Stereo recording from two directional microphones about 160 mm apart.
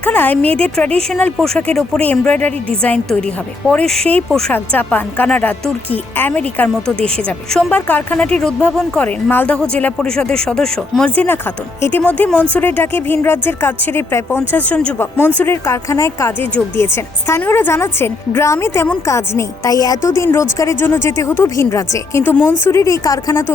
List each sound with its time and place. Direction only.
0.0 s speech: 10° left (ahead or behind)